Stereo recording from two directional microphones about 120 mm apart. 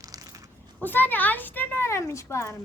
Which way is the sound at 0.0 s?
30° right (ahead or behind).